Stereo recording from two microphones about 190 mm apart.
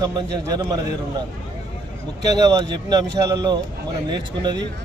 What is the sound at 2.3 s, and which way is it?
Speech, 20° right (ahead or behind).